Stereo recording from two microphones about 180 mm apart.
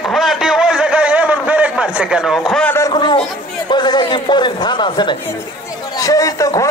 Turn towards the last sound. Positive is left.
turn(degrees=20)  # may be behind; listen again after turning